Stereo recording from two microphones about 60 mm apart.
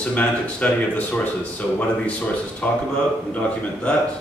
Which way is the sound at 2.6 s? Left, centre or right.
Centre.